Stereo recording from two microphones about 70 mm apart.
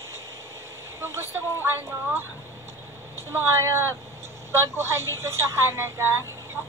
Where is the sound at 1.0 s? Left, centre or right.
Right.